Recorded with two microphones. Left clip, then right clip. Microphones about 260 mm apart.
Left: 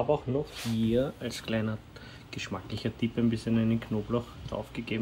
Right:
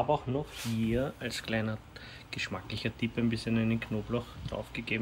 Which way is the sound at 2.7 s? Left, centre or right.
Centre.